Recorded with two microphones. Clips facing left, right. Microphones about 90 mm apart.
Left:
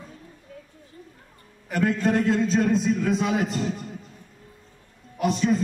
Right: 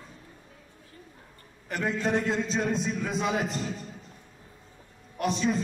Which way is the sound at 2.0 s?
Centre (ahead or behind).